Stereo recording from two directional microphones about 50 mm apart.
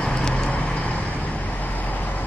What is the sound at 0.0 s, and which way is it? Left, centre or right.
Vehicle, left.